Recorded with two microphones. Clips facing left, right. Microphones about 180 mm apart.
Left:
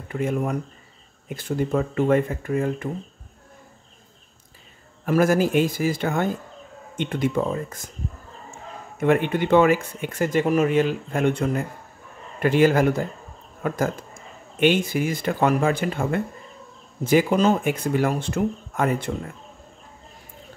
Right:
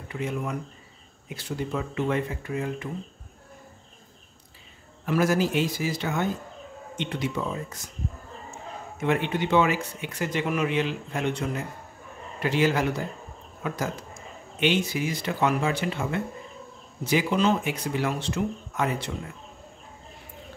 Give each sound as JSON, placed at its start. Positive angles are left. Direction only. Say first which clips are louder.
{"t": 0.1, "sound": "speech", "louder": "left 6 dB", "side_deg": 50}
{"t": 5.0, "sound": "speech", "louder": "left 4 dB", "side_deg": 50}
{"t": 9.0, "sound": "speech", "louder": "left 5 dB", "side_deg": 50}